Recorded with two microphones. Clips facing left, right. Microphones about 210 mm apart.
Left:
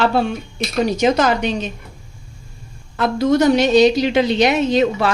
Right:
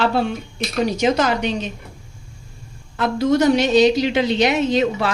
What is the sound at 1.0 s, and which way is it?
Speech, 45° left (ahead or behind).